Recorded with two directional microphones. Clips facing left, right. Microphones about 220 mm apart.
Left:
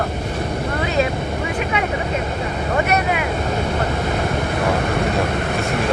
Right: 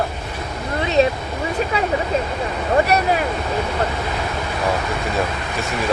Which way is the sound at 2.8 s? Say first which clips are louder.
Right 1 dB; 35° right (ahead or behind).